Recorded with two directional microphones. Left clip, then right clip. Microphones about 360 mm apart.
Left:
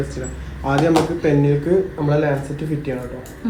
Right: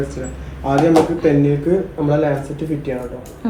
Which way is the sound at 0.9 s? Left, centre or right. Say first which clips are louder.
Right 3 dB; centre.